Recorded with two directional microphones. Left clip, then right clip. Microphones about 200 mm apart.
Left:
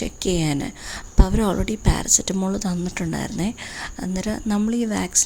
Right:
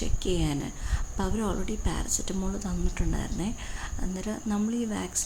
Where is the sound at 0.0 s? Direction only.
40° left (ahead or behind).